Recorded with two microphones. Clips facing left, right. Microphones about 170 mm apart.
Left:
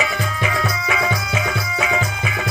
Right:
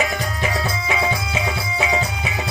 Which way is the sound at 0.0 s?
35° right (ahead or behind).